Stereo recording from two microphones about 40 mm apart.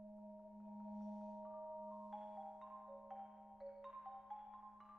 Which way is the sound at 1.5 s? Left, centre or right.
Centre.